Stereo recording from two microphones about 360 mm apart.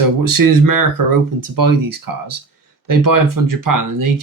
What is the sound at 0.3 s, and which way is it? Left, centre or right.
Speech, right.